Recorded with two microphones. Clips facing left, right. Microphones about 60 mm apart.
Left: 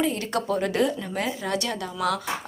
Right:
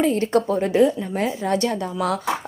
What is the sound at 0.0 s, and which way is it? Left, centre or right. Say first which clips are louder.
A woman's voice: right 7 dB; right.